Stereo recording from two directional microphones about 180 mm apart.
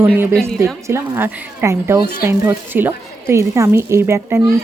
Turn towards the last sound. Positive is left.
turn(degrees=-15)  # may be behind; listen again after turning